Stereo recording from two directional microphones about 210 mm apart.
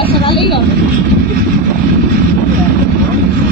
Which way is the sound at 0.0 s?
25° left (ahead or behind).